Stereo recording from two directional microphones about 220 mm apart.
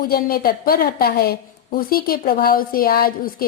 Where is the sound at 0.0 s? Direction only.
45° left (ahead or behind).